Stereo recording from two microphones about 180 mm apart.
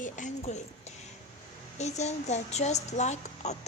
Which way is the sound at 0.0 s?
40° left (ahead or behind).